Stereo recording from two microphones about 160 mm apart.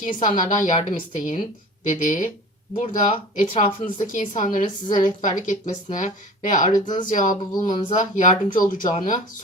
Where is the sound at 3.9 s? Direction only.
55° left (ahead or behind).